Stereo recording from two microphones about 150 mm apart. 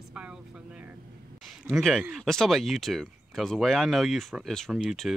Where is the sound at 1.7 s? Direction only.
5° left (ahead or behind).